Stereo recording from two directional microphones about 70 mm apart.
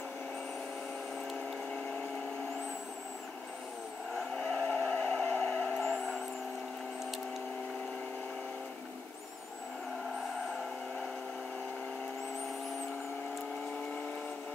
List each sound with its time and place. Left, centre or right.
4.4 s vehicle: centre
5.9 s vehicle: centre